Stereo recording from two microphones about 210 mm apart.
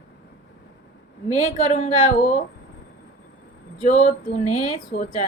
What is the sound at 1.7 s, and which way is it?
Speech, 35° left (ahead or behind).